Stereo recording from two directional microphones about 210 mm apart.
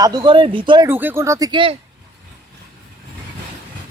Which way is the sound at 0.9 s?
10° right (ahead or behind).